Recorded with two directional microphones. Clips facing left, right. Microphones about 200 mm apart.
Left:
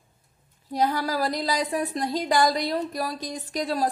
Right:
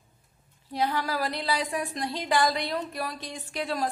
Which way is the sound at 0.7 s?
40° left (ahead or behind).